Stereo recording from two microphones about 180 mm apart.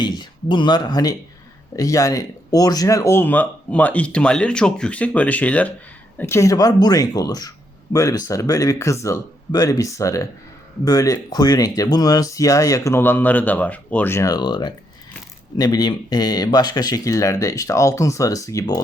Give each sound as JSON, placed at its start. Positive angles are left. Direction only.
{"t": 0.0, "sound": "speech", "side_deg": 25}